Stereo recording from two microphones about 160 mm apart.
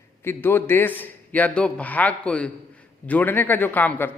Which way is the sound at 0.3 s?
15° left (ahead or behind).